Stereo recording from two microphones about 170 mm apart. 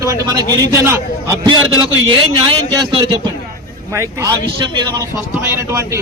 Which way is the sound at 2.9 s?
30° right (ahead or behind).